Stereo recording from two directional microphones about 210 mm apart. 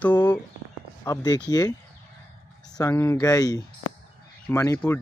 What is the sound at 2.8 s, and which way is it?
Speech, 15° left (ahead or behind).